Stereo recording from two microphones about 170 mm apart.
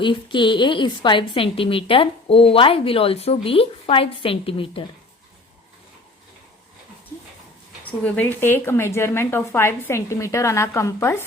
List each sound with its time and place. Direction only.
0.0 s a woman's voice: 30° left (ahead or behind)
7.9 s a woman's voice: 10° left (ahead or behind)